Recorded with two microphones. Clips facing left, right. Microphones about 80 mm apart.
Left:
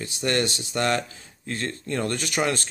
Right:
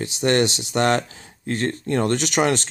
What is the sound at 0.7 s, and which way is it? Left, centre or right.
Speech, right.